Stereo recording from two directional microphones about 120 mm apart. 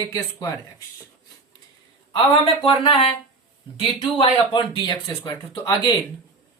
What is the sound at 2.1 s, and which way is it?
Speech, 45° left (ahead or behind).